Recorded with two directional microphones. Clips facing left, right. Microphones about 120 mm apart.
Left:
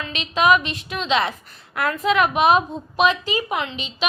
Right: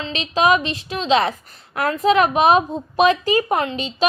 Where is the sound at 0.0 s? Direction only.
35° right (ahead or behind).